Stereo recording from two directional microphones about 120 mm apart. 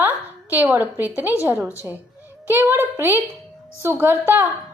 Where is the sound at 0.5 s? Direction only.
15° right (ahead or behind).